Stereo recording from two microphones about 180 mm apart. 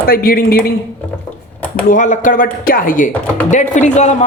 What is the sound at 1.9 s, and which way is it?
A man's voice, 45° left (ahead or behind).